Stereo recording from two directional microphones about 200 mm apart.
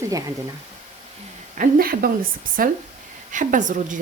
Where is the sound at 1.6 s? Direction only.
45° right (ahead or behind).